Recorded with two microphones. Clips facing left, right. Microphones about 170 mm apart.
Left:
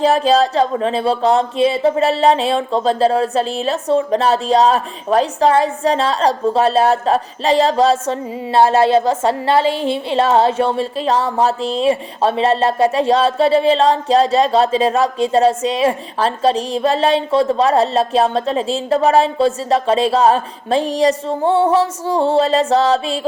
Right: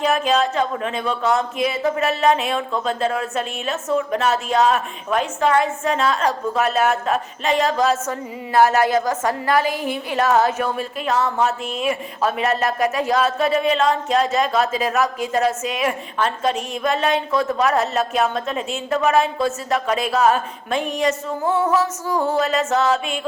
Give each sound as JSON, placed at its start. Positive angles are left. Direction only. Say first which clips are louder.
{"t": 0.0, "sound": "speech", "louder": "left 5 dB", "side_deg": 35}